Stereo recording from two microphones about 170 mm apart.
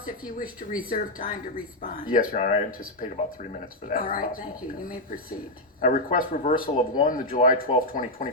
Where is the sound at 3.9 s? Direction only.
55° left (ahead or behind).